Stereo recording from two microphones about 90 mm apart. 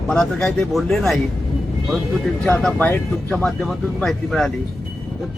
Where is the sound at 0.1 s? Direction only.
10° left (ahead or behind).